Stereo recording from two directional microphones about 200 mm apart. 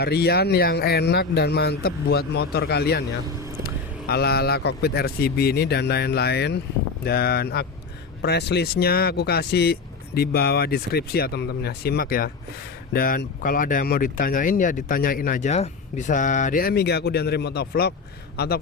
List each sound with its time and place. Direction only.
0.0 s speech: 55° left (ahead or behind)
4.0 s speech: 50° left (ahead or behind)